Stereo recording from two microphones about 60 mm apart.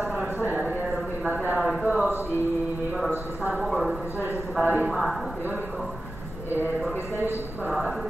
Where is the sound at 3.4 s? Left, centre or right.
Right.